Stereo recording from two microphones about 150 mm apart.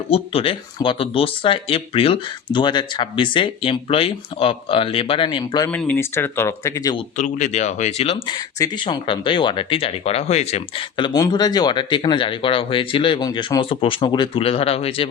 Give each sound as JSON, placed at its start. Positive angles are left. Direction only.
{"t": 0.1, "sound": "speech", "side_deg": 40}
{"t": 5.7, "sound": "speech", "side_deg": 15}
{"t": 7.2, "sound": "speech", "side_deg": 55}
{"t": 8.5, "sound": "speech", "side_deg": 30}